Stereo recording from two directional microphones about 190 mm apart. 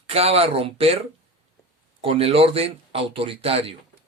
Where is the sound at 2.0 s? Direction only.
30° right (ahead or behind).